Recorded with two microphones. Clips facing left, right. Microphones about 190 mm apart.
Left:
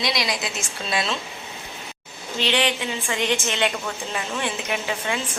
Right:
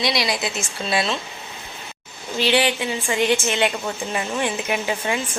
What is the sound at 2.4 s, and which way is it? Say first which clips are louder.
A woman's voice: right 3 dB; 10° right (ahead or behind).